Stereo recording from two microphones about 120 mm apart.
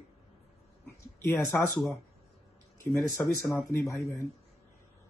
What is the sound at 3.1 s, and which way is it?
Speech, 25° left (ahead or behind).